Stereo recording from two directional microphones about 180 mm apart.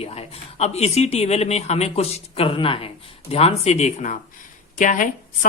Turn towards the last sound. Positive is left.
turn(degrees=45)  # may be behind; listen again after turning